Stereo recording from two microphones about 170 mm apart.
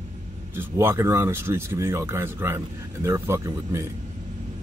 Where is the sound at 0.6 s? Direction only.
15° right (ahead or behind).